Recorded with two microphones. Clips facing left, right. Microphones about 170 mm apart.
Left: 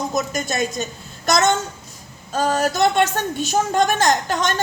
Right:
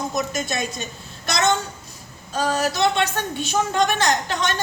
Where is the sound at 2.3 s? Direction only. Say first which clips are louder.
Left 3 dB; 50° left (ahead or behind).